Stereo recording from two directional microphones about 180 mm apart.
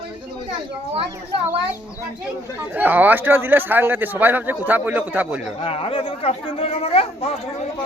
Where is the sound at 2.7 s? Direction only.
10° right (ahead or behind).